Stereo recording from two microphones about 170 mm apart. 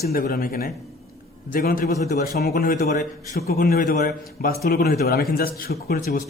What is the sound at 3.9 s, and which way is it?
A man's voice, 60° left (ahead or behind).